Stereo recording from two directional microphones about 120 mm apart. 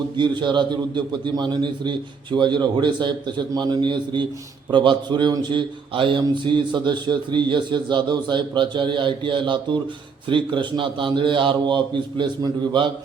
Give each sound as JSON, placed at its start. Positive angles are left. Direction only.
{"t": 0.2, "sound": "a man's voice", "side_deg": -40}